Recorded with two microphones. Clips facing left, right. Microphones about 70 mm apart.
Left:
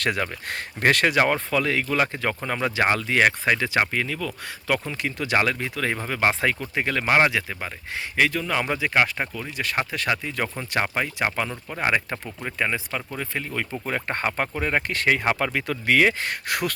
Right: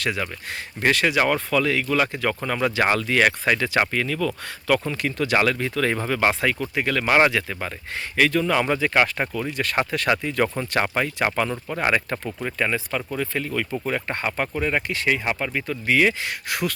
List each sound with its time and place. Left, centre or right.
0.0 s speech: left
1.2 s speech: left
6.7 s speech: left; by 12.7 s centre
13.1 s speech: left
14.9 s speech: left
15.5 s speech: left